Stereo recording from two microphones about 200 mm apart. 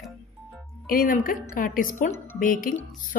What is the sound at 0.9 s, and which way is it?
Speech, 45° left (ahead or behind).